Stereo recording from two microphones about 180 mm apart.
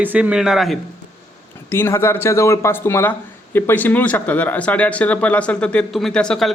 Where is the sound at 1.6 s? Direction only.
15° left (ahead or behind).